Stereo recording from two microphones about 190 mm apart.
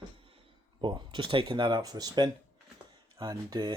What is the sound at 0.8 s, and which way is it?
Speech, 25° right (ahead or behind).